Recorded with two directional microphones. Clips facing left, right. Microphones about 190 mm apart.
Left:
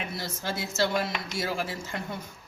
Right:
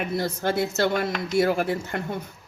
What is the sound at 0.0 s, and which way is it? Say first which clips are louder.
A woman's voice: right 9 dB; 55° right (ahead or behind).